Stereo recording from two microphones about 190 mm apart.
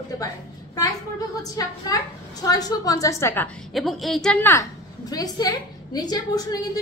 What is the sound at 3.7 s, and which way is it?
Speech, centre (ahead or behind).